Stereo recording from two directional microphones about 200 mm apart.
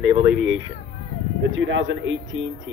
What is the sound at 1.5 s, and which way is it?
Speech, 70° right (ahead or behind).